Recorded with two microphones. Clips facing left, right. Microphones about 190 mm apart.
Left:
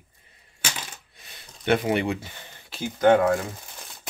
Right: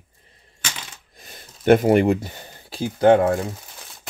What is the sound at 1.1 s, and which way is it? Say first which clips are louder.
Speech: right 5 dB; 45° right (ahead or behind).